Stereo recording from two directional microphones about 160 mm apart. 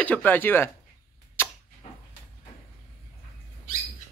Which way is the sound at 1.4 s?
15° left (ahead or behind).